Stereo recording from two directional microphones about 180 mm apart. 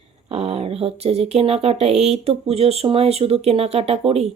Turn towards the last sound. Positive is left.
turn(degrees=-35)  # may be behind; listen again after turning